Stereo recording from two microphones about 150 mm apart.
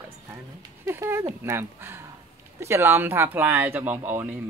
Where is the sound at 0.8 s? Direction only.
15° right (ahead or behind).